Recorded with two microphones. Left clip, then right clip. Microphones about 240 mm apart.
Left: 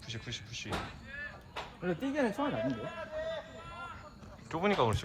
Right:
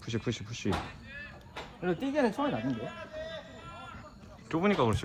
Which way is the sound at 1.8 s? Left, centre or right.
Right.